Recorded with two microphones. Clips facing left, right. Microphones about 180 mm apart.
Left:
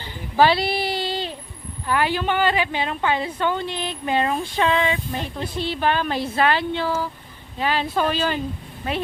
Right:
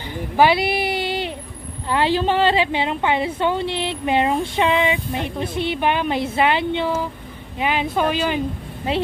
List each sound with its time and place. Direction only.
0.3 s a woman's voice: 15° right (ahead or behind)